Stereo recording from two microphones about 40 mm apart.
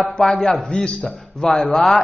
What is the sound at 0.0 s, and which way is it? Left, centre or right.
Speech, centre.